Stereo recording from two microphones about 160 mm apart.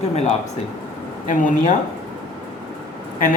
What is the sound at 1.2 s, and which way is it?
Speech, 55° left (ahead or behind).